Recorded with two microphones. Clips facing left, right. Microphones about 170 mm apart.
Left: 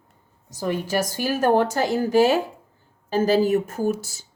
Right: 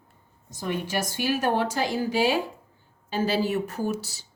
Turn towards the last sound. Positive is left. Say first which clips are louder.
# left 5 dB
turn(degrees=45)  # may be behind; listen again after turning